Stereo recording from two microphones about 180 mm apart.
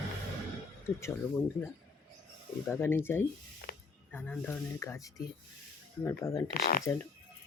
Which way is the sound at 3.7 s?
55° left (ahead or behind).